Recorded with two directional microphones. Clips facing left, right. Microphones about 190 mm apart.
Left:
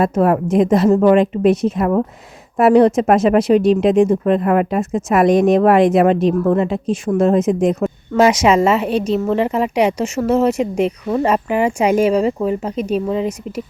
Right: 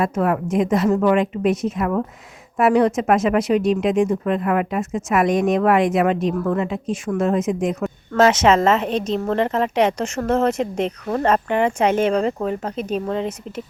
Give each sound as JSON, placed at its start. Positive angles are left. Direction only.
{"t": 0.0, "sound": "speech", "side_deg": 35}
{"t": 8.1, "sound": "speech", "side_deg": 10}